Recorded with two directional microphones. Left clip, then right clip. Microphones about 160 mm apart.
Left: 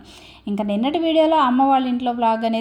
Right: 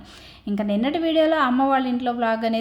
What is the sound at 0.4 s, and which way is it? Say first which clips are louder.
A woman's voice: left 2 dB; 15° left (ahead or behind).